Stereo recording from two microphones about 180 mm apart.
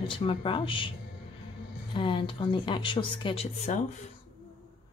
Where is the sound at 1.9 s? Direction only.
30° left (ahead or behind).